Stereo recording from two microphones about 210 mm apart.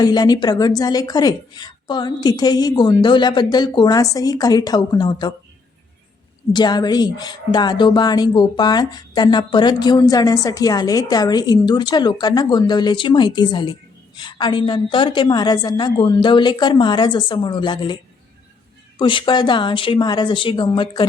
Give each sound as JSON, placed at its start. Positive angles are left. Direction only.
{"t": 0.0, "sound": "speech", "side_deg": 20}
{"t": 6.5, "sound": "speech", "side_deg": 20}
{"t": 18.9, "sound": "speech", "side_deg": 20}